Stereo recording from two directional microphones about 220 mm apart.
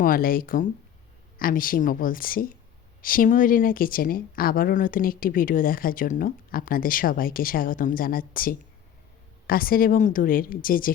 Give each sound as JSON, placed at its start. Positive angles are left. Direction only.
{"t": 0.0, "sound": "speech", "side_deg": 40}